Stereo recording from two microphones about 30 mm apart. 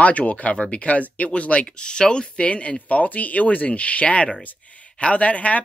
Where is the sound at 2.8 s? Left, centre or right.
Left.